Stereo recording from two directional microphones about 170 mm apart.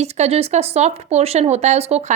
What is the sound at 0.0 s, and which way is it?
Speech, 40° right (ahead or behind).